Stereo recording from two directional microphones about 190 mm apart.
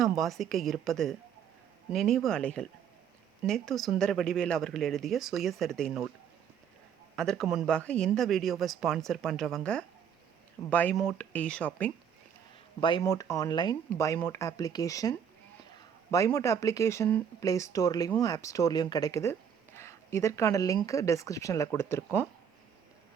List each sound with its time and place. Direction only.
0.0 s speech: centre (ahead or behind)
7.2 s speech: centre (ahead or behind)
12.8 s speech: 20° left (ahead or behind)
16.1 s speech: 15° left (ahead or behind)